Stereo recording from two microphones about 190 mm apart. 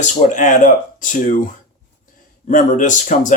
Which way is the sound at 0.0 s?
40° left (ahead or behind).